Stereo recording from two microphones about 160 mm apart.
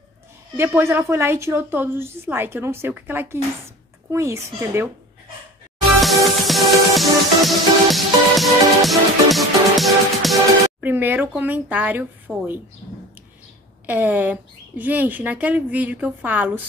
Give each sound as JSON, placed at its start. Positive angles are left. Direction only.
{"t": 0.6, "sound": "a woman's voice", "side_deg": -15}
{"t": 5.9, "sound": "music", "side_deg": 0}
{"t": 10.8, "sound": "a woman's voice", "side_deg": -10}
{"t": 13.8, "sound": "a woman's voice", "side_deg": -10}